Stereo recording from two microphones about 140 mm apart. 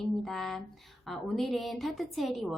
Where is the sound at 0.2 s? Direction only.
Centre (ahead or behind).